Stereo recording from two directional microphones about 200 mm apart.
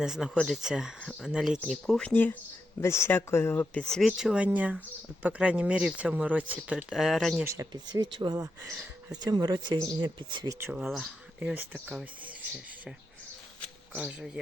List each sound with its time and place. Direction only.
0.0 s speech: centre (ahead or behind)
7.4 s speech: 15° right (ahead or behind)
10.7 s speech: 5° right (ahead or behind)
13.9 s speech: 5° right (ahead or behind)